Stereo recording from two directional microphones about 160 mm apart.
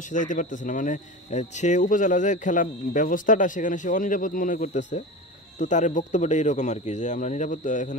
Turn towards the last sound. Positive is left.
turn(degrees=50)  # may be behind; listen again after turning